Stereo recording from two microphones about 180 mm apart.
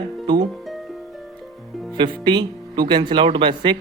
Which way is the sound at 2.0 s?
25° right (ahead or behind).